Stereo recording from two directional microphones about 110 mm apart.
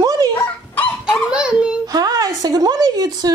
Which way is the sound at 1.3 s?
10° right (ahead or behind).